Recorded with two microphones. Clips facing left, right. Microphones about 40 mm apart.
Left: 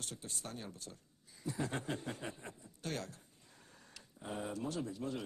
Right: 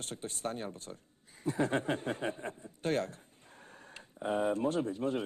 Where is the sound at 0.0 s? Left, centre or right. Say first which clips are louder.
Right 8 dB; right.